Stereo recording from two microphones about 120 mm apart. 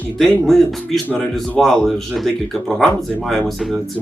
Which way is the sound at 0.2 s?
5° left (ahead or behind).